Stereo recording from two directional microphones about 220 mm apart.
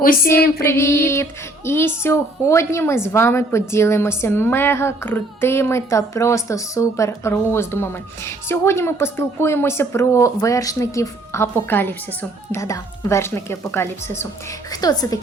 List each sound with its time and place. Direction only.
0.0 s female singing: 40° left (ahead or behind)
0.6 s speech: 10° left (ahead or behind)